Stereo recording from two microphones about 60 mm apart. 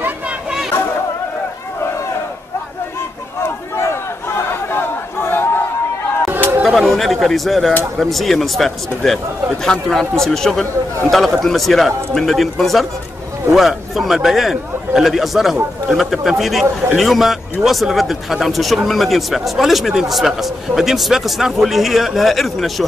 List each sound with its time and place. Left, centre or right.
3.7 s chatter: left
6.2 s chatter: right
6.6 s a man's voice: centre